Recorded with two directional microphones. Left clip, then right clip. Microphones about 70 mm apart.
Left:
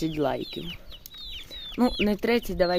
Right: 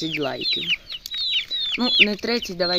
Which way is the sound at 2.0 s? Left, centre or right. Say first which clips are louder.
Even; centre.